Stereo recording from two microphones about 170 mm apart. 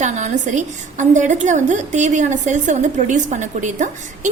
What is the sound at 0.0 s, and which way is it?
A woman's voice, 45° right (ahead or behind).